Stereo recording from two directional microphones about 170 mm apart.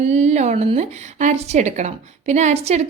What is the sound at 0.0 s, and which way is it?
Speech, 40° right (ahead or behind).